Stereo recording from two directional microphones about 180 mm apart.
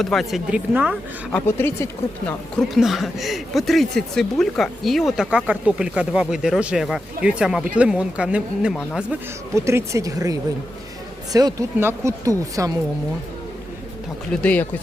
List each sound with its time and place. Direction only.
0.0 s speech: centre (ahead or behind)
1.3 s speech: 15° left (ahead or behind)
2.2 s speech: centre (ahead or behind)
9.6 s speech: 15° right (ahead or behind)
14.4 s speech: 10° left (ahead or behind)